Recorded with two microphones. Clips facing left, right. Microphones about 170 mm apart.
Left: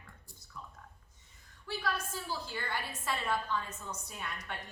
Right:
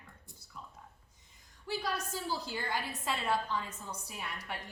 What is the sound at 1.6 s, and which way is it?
A woman's voice, 15° right (ahead or behind).